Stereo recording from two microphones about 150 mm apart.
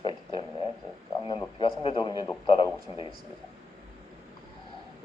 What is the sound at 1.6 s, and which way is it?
Speech, 35° left (ahead or behind).